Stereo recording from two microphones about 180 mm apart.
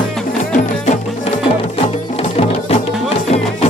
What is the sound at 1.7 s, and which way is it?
Music, 30° left (ahead or behind).